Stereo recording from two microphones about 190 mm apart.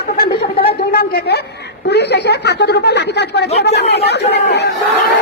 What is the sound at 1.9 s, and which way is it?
Speech, 60° left (ahead or behind).